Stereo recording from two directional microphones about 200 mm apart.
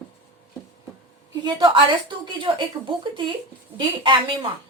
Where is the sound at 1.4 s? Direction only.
25° right (ahead or behind).